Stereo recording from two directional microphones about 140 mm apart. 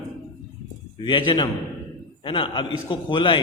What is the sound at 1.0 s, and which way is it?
A man's voice, 35° left (ahead or behind).